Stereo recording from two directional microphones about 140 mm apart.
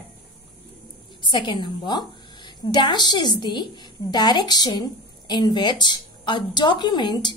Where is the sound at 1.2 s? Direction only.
35° left (ahead or behind).